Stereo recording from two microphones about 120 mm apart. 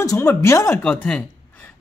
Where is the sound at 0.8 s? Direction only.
10° left (ahead or behind).